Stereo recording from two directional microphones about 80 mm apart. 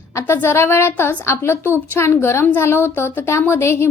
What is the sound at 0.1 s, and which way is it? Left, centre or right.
A woman's voice, left.